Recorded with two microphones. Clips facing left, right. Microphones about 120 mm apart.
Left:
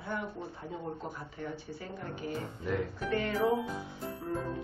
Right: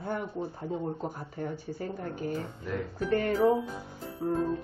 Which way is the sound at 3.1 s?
40° right (ahead or behind).